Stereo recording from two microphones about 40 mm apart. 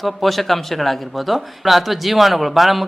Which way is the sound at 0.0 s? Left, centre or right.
Centre.